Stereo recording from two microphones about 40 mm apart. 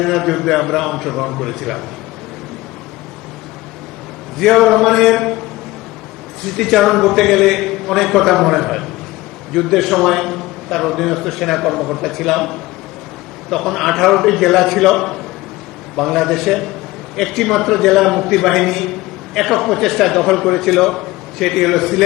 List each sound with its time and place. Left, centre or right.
0.0 s a man's voice: centre
4.4 s a man's voice: centre
6.4 s a man's voice: centre